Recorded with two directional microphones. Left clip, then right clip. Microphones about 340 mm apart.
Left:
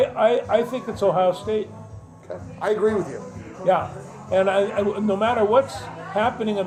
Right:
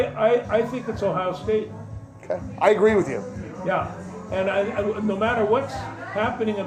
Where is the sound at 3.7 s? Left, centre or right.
Left.